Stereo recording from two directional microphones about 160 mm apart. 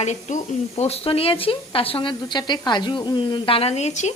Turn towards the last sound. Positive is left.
turn(degrees=45)  # may be behind; listen again after turning